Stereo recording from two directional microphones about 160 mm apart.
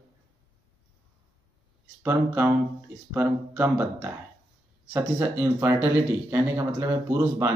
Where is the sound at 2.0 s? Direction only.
10° right (ahead or behind).